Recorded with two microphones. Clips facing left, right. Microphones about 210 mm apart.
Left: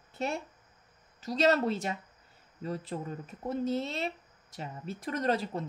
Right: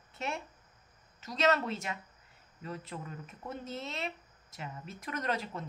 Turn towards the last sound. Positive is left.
turn(degrees=35)  # may be behind; listen again after turning